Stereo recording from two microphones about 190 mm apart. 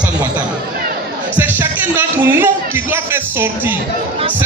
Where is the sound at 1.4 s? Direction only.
10° right (ahead or behind).